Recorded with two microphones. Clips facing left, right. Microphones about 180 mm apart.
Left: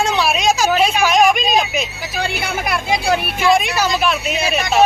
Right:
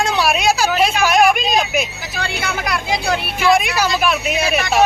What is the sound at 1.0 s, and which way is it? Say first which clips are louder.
Vehicle: right 1 dB; 10° right (ahead or behind).